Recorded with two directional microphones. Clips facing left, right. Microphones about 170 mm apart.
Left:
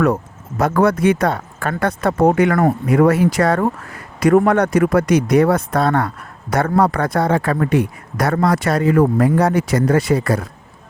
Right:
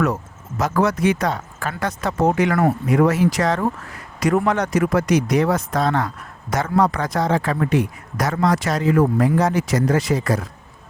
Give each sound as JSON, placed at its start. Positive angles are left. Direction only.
{"t": 0.6, "sound": "speech", "side_deg": 55}